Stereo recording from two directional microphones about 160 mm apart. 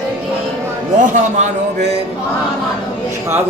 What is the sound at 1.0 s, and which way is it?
Speech, 45° right (ahead or behind).